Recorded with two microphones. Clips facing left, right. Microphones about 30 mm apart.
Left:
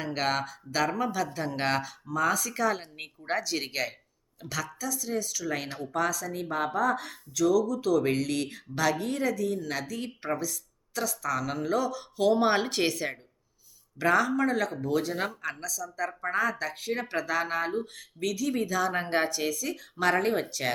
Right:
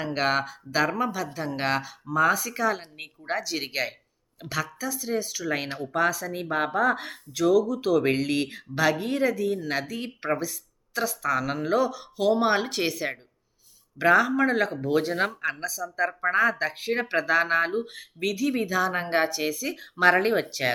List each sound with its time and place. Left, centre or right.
0.0 s speech: centre
2.0 s speech: centre
11.9 s speech: centre
14.0 s speech: right